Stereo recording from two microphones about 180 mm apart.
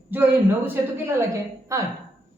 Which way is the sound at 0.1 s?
10° right (ahead or behind).